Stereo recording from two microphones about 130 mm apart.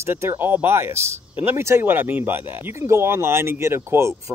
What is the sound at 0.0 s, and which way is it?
Speech, 20° right (ahead or behind).